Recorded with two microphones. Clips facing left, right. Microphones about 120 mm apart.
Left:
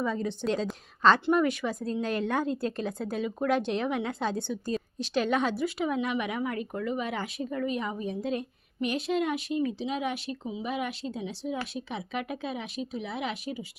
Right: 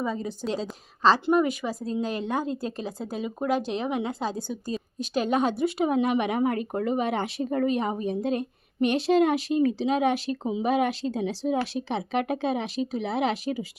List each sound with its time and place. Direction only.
0.0 s speech: 10° right (ahead or behind)
4.9 s a woman's voice: 40° right (ahead or behind)
5.5 s speech: 60° right (ahead or behind); by 13.7 s 90° right